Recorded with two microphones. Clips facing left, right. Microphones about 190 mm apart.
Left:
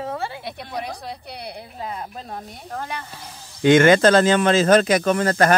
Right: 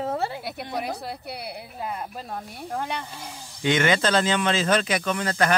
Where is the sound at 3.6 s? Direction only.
50° left (ahead or behind).